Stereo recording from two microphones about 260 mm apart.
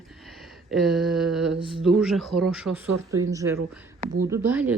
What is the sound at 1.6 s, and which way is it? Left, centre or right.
Speech, centre.